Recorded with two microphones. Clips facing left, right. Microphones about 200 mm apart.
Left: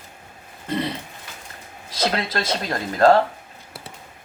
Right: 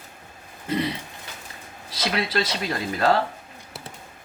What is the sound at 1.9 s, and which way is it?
Speech, 50° left (ahead or behind).